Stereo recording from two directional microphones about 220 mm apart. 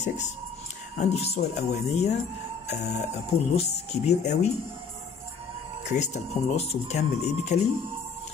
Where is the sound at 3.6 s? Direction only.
30° left (ahead or behind).